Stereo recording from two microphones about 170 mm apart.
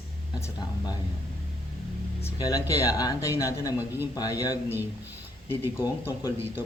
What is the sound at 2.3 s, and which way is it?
Speech, 20° left (ahead or behind).